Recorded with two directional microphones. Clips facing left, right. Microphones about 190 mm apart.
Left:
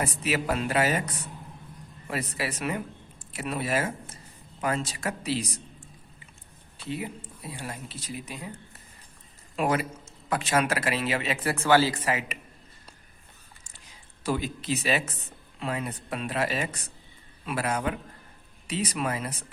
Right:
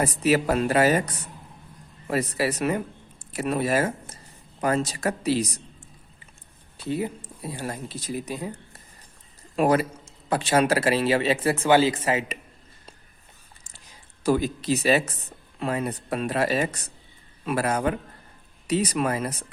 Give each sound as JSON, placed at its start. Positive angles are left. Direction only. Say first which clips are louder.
{"t": 0.0, "sound": "speech", "louder": "right 7 dB", "side_deg": -40}
{"t": 6.8, "sound": "speech", "louder": "right 6 dB", "side_deg": -40}
{"t": 9.6, "sound": "speech", "louder": "right 6 dB", "side_deg": -40}
{"t": 11.5, "sound": "speech", "louder": "even", "side_deg": -20}
{"t": 14.3, "sound": "speech", "louder": "right 6 dB", "side_deg": -40}